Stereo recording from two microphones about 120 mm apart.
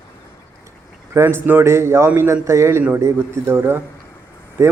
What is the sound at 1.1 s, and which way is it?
A man's voice, 20° right (ahead or behind).